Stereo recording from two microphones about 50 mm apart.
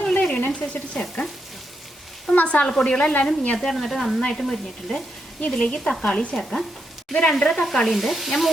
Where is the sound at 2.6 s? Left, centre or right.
Centre.